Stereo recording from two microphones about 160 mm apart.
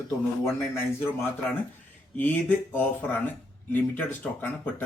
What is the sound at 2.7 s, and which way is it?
Speech, 10° left (ahead or behind).